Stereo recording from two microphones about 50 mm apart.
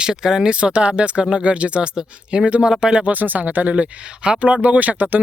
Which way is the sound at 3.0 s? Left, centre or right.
Right.